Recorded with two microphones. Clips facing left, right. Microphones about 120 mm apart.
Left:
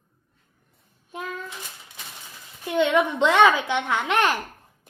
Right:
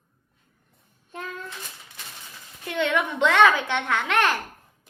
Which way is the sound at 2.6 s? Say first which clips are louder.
Left 4 dB; 15° left (ahead or behind).